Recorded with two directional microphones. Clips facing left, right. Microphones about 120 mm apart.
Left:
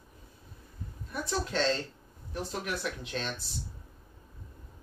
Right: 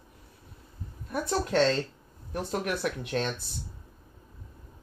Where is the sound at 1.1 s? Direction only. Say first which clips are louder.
Right 5 dB; 50° right (ahead or behind).